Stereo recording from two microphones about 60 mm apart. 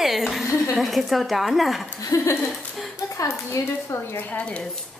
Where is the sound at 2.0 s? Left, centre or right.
Left.